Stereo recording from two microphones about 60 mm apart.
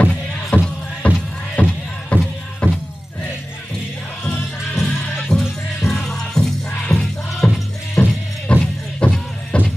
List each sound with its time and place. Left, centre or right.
0.5 s music: left
4.2 s music: centre